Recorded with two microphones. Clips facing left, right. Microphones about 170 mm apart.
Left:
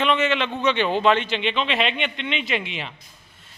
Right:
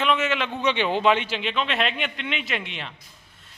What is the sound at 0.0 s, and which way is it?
Speech, 5° right (ahead or behind).